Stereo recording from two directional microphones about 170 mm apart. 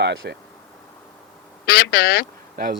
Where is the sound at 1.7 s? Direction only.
65° left (ahead or behind).